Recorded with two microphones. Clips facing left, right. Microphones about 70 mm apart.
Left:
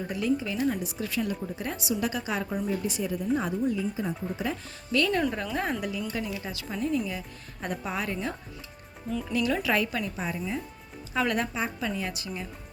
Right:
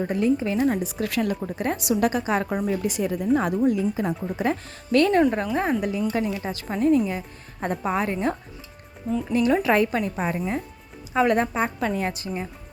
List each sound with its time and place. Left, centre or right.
0.0 s a woman's voice: right
1.0 s a woman's voice: right
2.0 s speech: right
2.5 s a woman's voice: right
3.6 s a woman's voice: right
11.1 s speech: right
11.5 s a woman's voice: right